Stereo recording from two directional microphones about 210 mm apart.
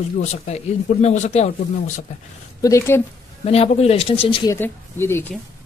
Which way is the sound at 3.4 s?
30° left (ahead or behind).